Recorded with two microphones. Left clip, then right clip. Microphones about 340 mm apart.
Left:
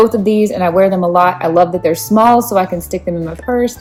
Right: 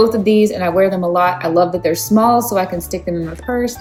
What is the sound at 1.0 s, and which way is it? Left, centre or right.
Speech, left.